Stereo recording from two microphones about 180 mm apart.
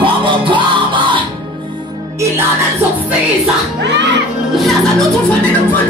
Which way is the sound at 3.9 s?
75° right (ahead or behind).